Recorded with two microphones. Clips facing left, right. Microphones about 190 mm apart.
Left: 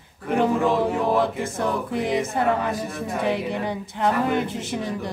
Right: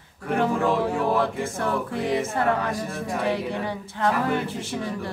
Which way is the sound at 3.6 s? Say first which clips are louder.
Left 2 dB; 20° left (ahead or behind).